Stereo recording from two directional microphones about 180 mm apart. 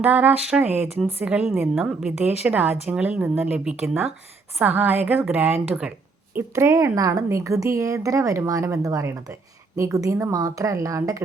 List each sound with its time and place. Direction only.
0.0 s a woman's voice: 10° right (ahead or behind)